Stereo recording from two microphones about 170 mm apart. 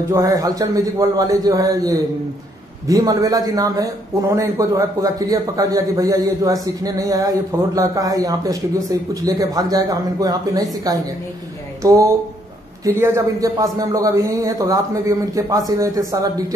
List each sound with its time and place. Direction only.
0.1 s a man's voice: 20° right (ahead or behind)